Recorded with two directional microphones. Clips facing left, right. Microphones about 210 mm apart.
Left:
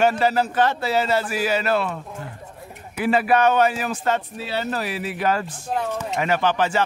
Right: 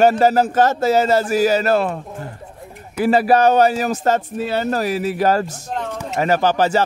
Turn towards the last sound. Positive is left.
turn(degrees=-40)  # may be behind; listen again after turning